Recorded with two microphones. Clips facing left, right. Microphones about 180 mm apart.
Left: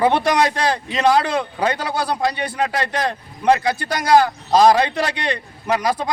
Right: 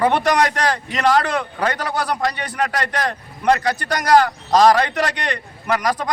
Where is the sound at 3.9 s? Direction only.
10° left (ahead or behind).